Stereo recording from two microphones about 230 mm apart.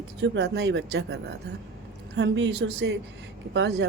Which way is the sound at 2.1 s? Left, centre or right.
Right.